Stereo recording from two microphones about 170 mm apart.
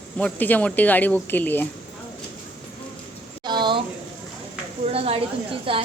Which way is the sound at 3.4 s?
25° right (ahead or behind).